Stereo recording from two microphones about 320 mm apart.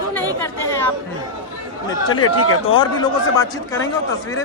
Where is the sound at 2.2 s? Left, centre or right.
Left.